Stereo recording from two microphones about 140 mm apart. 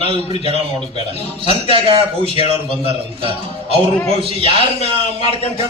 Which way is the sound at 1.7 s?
40° right (ahead or behind).